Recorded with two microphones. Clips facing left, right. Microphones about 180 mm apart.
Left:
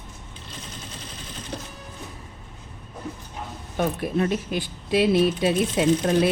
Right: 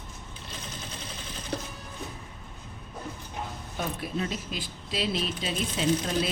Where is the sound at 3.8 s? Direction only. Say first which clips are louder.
Left 8 dB; 55° left (ahead or behind).